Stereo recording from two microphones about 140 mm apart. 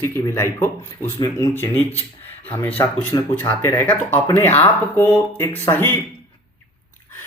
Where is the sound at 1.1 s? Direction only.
30° left (ahead or behind).